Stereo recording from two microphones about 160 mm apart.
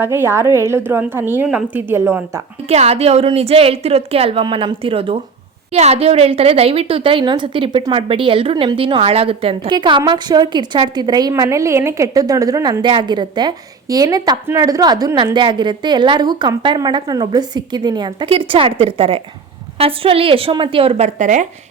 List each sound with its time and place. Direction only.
0.0 s a woman's voice: 15° right (ahead or behind)
2.6 s a woman's voice: 40° right (ahead or behind)